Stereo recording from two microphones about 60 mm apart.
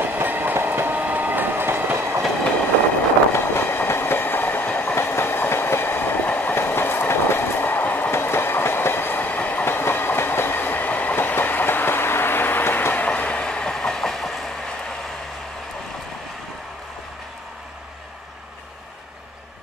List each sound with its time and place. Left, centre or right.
0.0 s train: right
3.3 s train: left
8.1 s train: left
9.7 s train: left
12.9 s train: left; by 14.5 s centre